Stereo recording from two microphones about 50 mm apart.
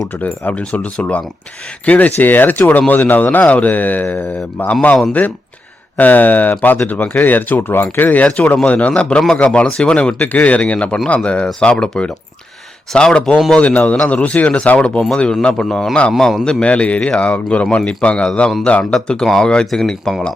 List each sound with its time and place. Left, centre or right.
0.1 s speech: left
2.1 s speech: left
6.0 s speech: left; by 13.3 s centre
13.6 s speech: left; by 20.1 s centre